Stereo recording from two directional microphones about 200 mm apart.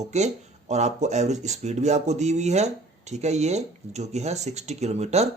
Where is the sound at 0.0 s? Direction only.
35° right (ahead or behind).